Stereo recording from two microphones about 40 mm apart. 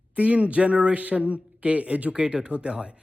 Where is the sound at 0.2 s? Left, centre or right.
Right.